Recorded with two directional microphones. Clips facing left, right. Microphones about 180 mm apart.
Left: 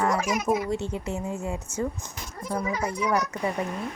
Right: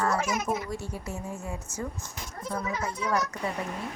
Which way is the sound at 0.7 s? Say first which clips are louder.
Left 6 dB; 25° left (ahead or behind).